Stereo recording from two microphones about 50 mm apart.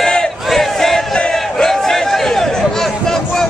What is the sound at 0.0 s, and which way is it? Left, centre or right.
Battle cry, centre.